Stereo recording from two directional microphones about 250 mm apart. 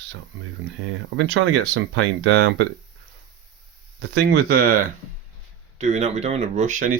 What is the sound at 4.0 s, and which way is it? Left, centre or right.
Speech, right.